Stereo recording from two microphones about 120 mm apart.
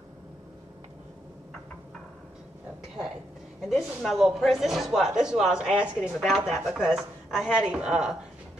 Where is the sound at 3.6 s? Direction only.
Centre (ahead or behind).